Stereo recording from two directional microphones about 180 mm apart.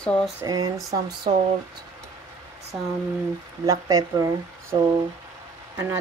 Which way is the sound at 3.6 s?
20° right (ahead or behind).